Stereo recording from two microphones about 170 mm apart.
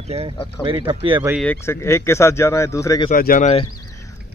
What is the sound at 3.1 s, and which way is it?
Speech, 55° left (ahead or behind).